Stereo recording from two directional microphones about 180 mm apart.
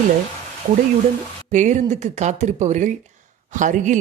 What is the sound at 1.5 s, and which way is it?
Speech, 40° right (ahead or behind).